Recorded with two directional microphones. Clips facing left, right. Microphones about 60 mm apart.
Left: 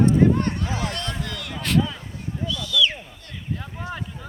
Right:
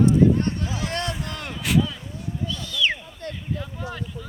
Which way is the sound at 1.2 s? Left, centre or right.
Right.